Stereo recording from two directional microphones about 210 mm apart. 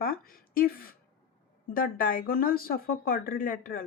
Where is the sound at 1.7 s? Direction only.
40° left (ahead or behind).